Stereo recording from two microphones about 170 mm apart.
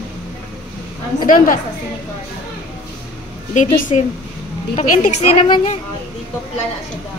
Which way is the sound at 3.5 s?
45° left (ahead or behind).